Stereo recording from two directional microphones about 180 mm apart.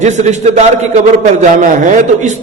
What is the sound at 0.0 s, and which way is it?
A man's voice, 40° right (ahead or behind).